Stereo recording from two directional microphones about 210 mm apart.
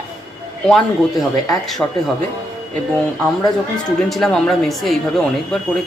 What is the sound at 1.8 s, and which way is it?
Speech, 5° left (ahead or behind).